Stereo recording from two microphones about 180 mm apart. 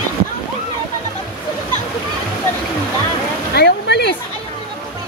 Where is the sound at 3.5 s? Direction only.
65° left (ahead or behind).